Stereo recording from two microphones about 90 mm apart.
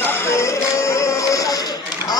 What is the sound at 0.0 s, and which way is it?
Music, 25° left (ahead or behind).